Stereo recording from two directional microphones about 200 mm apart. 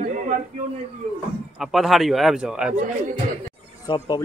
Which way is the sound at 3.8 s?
20° left (ahead or behind).